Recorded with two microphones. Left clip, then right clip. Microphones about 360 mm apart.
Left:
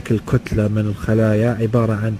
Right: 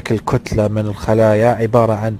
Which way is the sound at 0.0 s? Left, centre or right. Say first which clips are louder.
Right 3 dB; centre.